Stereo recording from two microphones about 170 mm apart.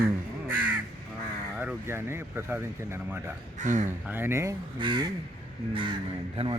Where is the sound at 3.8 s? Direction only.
15° right (ahead or behind).